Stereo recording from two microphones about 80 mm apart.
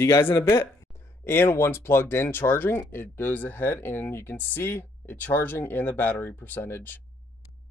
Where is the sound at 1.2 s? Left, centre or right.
Left.